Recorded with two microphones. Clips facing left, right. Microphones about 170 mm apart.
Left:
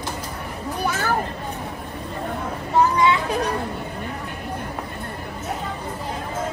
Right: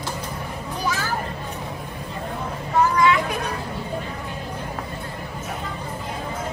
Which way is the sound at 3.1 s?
35° left (ahead or behind).